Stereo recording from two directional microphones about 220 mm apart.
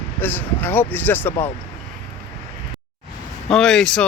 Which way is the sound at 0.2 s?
10° left (ahead or behind).